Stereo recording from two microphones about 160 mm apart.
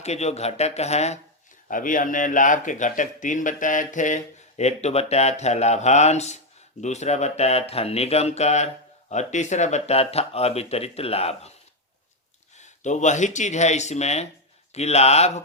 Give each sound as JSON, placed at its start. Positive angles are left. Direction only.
{"t": 0.0, "sound": "a man's voice", "side_deg": 45}
{"t": 1.6, "sound": "a man's voice", "side_deg": 55}
{"t": 12.5, "sound": "speech", "side_deg": 50}